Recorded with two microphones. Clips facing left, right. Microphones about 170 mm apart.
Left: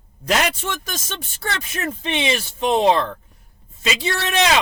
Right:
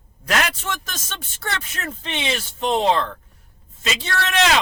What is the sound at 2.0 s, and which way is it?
Speech, 15° left (ahead or behind).